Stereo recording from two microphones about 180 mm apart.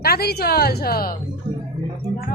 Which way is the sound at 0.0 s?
60° left (ahead or behind).